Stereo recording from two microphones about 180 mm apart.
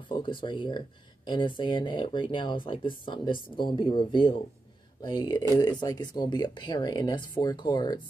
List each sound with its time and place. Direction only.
0.1 s speech: 25° left (ahead or behind)